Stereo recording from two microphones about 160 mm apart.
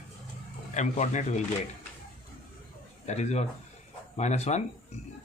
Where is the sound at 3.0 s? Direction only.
45° left (ahead or behind).